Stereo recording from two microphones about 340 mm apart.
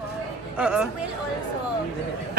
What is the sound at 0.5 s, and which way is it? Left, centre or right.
Speech, centre.